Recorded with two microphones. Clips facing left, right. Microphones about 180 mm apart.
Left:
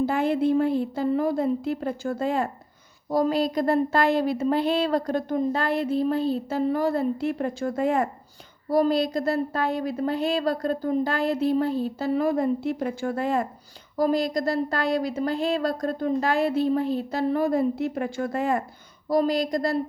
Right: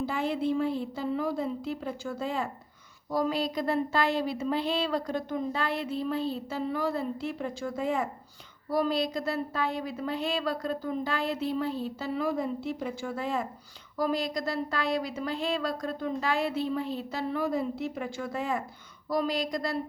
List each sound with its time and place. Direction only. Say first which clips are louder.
0.0 s speech: left 7 dB; 55° left (ahead or behind)
3.1 s speech: left 6 dB; 40° left (ahead or behind); by 8.1 s 55° left (ahead or behind)
8.7 s speech: left 6 dB; 45° left (ahead or behind)
13.9 s speech: left 6 dB; 40° left (ahead or behind)
19.0 s speech: left 6 dB; 40° left (ahead or behind)